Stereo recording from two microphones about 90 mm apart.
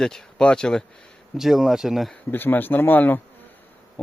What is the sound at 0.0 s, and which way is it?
Speech, 5° left (ahead or behind).